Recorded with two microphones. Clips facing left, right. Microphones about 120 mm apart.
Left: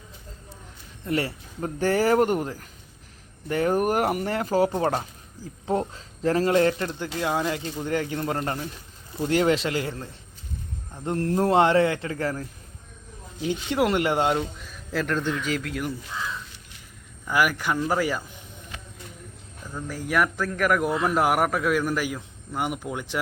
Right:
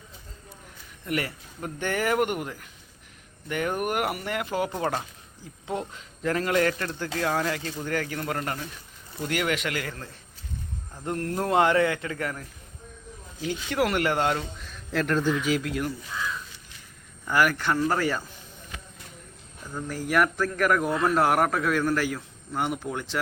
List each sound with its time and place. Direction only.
1.0 s speech: 30° left (ahead or behind)
13.5 s speech: 25° left (ahead or behind)
14.7 s speech: centre (ahead or behind)
17.2 s a man's voice: 10° left (ahead or behind)
19.7 s a man's voice: centre (ahead or behind); by 23.2 s 15° left (ahead or behind)